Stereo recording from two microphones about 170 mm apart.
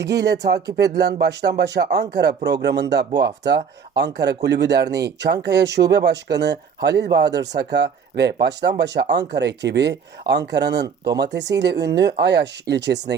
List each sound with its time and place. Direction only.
0.0 s speech: 80° right